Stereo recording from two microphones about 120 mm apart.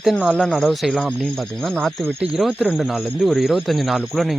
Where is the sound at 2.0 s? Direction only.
10° right (ahead or behind).